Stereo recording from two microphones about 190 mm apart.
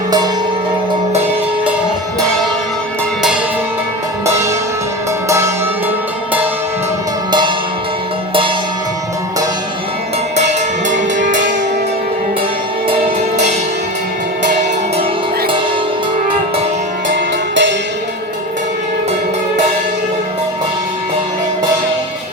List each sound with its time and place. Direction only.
7.3 s music: 25° right (ahead or behind)
10.3 s music: 40° right (ahead or behind)
17.5 s music: 70° right (ahead or behind)